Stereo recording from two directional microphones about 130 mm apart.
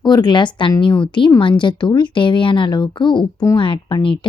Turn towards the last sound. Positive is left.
turn(degrees=40)  # may be behind; listen again after turning